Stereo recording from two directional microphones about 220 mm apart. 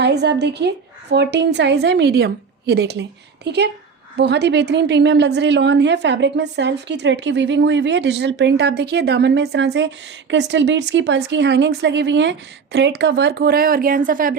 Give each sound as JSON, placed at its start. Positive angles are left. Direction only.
{"t": 0.0, "sound": "a woman's voice", "side_deg": -50}